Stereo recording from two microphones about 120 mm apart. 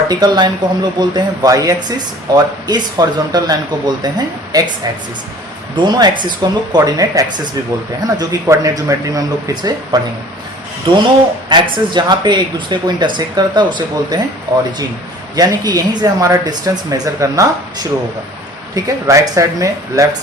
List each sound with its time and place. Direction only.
0.1 s speech: 35° right (ahead or behind)
5.7 s speech: 35° right (ahead or behind)
15.4 s speech: 35° right (ahead or behind)